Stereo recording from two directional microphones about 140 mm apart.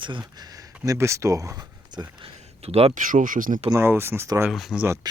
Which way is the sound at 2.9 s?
70° right (ahead or behind).